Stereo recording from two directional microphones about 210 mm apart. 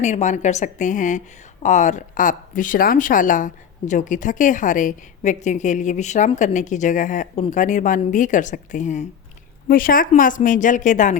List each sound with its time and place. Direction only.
0.0 s speech: 35° left (ahead or behind)